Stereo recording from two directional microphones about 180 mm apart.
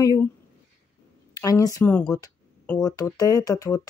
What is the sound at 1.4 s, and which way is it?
Speech, 20° left (ahead or behind).